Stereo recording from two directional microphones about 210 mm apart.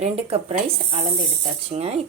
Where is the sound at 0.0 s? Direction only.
30° right (ahead or behind).